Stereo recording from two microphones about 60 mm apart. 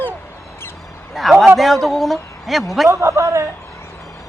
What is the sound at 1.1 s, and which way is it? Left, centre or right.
A man's voice, centre.